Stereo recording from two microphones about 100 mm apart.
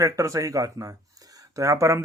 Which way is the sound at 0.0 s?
35° right (ahead or behind).